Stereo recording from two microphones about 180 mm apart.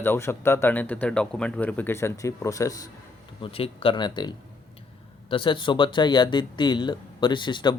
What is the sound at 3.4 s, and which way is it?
Speech, 30° left (ahead or behind).